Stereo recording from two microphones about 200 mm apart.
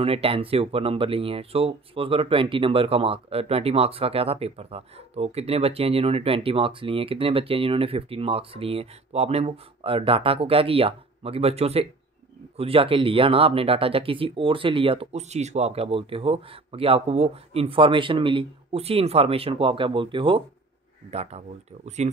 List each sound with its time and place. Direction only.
0.0 s speech: 30° right (ahead or behind)